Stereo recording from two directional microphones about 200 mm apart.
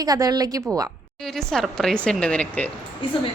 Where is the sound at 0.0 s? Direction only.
20° right (ahead or behind).